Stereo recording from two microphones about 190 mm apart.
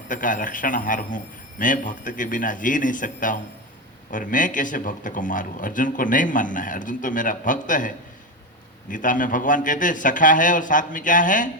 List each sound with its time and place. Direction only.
0.1 s speech: 45° left (ahead or behind)